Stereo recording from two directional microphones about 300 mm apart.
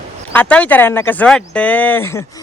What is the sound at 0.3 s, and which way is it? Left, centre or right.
A man's voice, centre.